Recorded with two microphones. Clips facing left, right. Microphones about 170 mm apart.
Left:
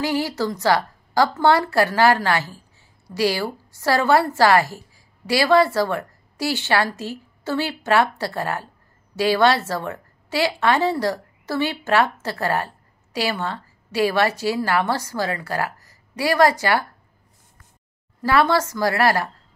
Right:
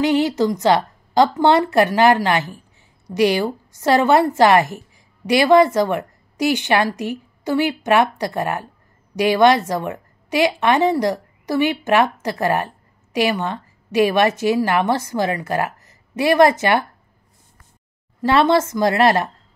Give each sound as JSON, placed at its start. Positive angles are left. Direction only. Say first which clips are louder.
{"t": 0.0, "sound": "a woman's voice", "louder": "right 6 dB", "side_deg": -20}
{"t": 18.2, "sound": "a woman's voice", "louder": "right 3 dB", "side_deg": -25}